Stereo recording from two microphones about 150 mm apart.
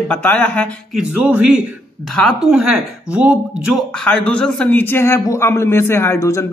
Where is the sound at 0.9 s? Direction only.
5° right (ahead or behind).